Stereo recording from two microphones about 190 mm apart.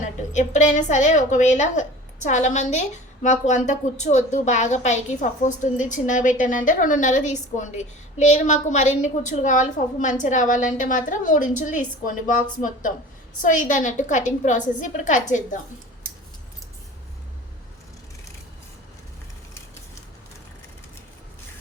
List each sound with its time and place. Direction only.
0.3 s a woman's voice: 40° left (ahead or behind)